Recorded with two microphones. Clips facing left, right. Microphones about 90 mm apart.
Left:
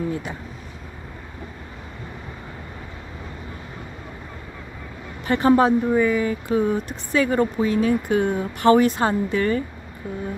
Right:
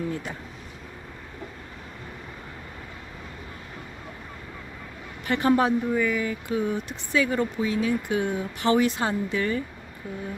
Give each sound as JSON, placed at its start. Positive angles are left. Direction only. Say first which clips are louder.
{"t": 5.2, "sound": "speech", "louder": "left 5 dB", "side_deg": 35}